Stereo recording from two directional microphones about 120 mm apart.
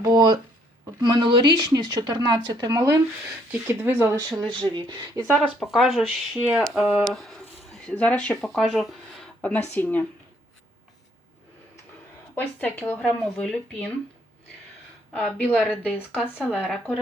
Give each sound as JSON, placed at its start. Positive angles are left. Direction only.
{"t": 0.0, "sound": "a sound", "side_deg": -35}
{"t": 1.0, "sound": "speech", "side_deg": -40}
{"t": 3.7, "sound": "speech", "side_deg": -15}
{"t": 4.3, "sound": "speech", "side_deg": -35}
{"t": 5.3, "sound": "speech", "side_deg": 5}
{"t": 9.7, "sound": "speech", "side_deg": 15}
{"t": 12.3, "sound": "speech", "side_deg": 15}
{"t": 15.1, "sound": "speech", "side_deg": 10}
{"t": 15.5, "sound": "speech", "side_deg": -5}